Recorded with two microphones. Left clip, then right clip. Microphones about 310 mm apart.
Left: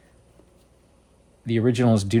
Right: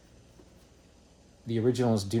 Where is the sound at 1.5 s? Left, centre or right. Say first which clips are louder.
Left 6 dB; left.